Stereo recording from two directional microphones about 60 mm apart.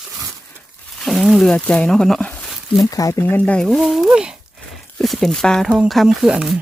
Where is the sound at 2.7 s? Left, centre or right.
Left.